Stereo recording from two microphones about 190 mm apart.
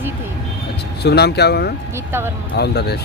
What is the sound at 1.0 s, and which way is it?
A man's voice, 60° left (ahead or behind).